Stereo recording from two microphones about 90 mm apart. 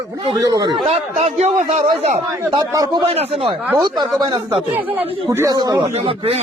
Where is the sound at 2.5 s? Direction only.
45° right (ahead or behind).